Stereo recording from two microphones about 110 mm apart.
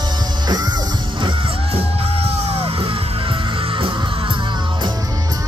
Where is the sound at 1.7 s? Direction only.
60° right (ahead or behind).